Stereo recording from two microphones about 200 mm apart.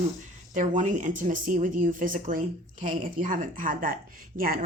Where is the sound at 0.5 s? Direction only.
40° right (ahead or behind).